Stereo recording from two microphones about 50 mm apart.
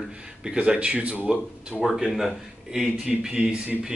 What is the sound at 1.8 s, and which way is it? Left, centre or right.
A man's voice, centre.